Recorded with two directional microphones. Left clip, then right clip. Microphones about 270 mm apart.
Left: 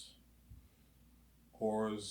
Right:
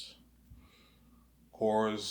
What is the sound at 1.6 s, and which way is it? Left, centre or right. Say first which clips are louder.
Speech: right 7 dB; centre.